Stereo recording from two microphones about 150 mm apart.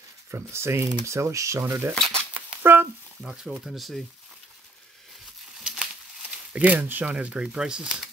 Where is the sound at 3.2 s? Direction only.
5° right (ahead or behind).